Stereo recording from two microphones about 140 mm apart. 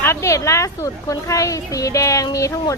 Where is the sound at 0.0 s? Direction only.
20° left (ahead or behind).